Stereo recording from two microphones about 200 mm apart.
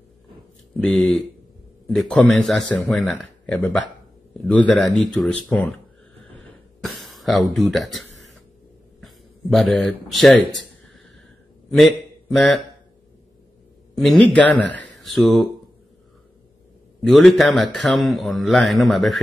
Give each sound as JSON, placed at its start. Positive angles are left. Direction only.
{"t": 0.7, "sound": "speech", "side_deg": 5}
{"t": 6.8, "sound": "speech", "side_deg": 0}
{"t": 9.0, "sound": "speech", "side_deg": 0}
{"t": 12.4, "sound": "speech", "side_deg": 0}
{"t": 13.9, "sound": "speech", "side_deg": 5}
{"t": 17.0, "sound": "speech", "side_deg": 0}